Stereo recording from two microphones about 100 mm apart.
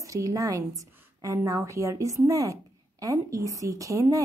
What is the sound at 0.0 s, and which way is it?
A woman's voice, 35° right (ahead or behind).